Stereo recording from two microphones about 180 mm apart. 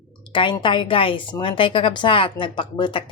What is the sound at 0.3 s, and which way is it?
A woman's voice, 25° left (ahead or behind).